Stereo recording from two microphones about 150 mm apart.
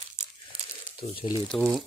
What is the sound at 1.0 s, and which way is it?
Speech, 45° left (ahead or behind).